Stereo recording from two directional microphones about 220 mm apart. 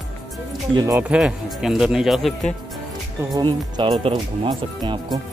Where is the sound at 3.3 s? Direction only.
20° right (ahead or behind).